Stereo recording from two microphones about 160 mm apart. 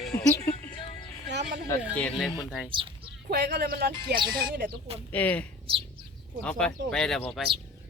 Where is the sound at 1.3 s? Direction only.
90° right.